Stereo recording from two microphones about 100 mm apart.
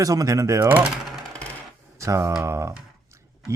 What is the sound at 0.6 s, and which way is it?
Speech, 20° right (ahead or behind).